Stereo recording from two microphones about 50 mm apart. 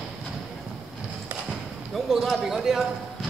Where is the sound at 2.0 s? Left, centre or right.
Centre.